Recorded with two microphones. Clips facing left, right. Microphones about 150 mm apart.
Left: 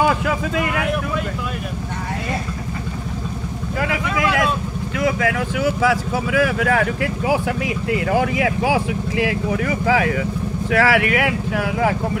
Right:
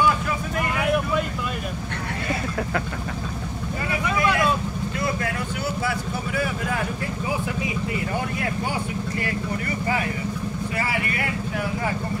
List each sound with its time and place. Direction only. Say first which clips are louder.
0.0 s vehicle: left 4 dB; 90° left
3.8 s vehicle: left 3 dB; 90° left
4.9 s speech: left 9 dB; 90° left